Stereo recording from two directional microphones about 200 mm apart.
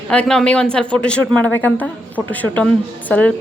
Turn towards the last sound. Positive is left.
turn(degrees=5)  # may be behind; listen again after turning